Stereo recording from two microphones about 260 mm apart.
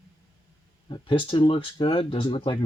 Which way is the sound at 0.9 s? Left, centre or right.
Centre.